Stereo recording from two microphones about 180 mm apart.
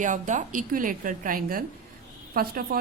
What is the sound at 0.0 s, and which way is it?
A woman's voice, 45° right (ahead or behind).